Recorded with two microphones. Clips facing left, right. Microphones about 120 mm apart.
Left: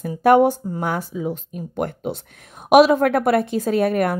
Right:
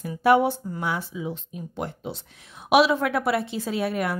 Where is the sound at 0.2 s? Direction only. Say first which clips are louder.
Left 5 dB; 45° left (ahead or behind).